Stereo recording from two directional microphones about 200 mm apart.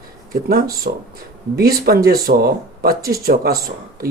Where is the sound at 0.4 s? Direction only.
50° right (ahead or behind).